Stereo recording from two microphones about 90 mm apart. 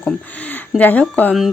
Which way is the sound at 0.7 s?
15° left (ahead or behind).